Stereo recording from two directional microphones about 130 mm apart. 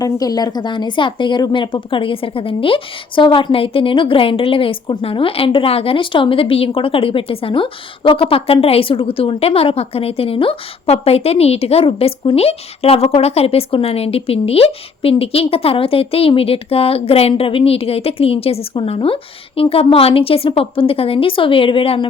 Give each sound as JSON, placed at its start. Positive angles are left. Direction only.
{"t": 0.0, "sound": "speech", "side_deg": 30}